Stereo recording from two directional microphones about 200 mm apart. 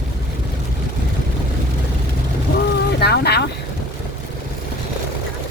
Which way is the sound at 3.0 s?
55° left (ahead or behind).